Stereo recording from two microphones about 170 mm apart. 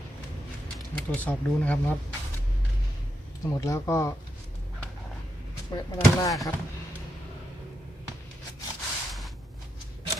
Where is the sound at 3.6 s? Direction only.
15° left (ahead or behind).